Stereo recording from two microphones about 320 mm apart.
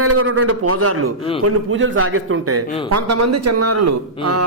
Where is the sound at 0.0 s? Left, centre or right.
Right.